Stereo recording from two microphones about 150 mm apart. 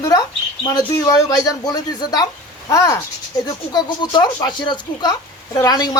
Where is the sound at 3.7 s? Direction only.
30° left (ahead or behind).